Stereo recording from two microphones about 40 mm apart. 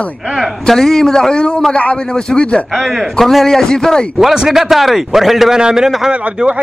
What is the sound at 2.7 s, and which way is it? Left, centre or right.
A man's voice, centre.